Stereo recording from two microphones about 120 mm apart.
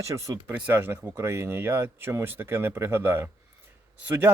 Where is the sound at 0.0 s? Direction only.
25° right (ahead or behind).